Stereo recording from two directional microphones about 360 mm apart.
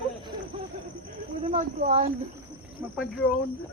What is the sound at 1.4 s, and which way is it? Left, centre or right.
Speech, centre.